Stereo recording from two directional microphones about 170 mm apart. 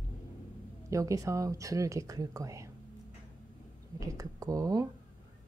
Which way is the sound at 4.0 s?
20° right (ahead or behind).